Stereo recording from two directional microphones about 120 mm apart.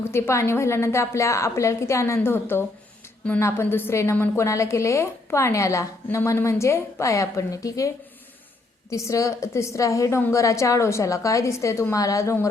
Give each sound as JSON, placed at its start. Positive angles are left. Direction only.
{"t": 0.1, "sound": "a woman's voice", "side_deg": 20}